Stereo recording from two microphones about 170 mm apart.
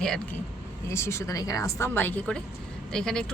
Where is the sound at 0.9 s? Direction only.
15° left (ahead or behind).